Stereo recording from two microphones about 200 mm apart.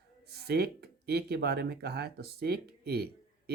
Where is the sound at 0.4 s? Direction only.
50° right (ahead or behind).